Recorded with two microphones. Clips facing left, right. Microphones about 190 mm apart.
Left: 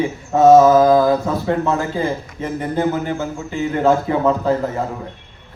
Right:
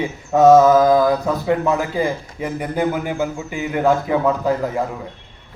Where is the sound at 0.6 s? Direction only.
20° left (ahead or behind).